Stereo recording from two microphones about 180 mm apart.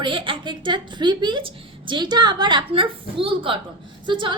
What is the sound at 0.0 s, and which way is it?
A woman's voice, 30° right (ahead or behind).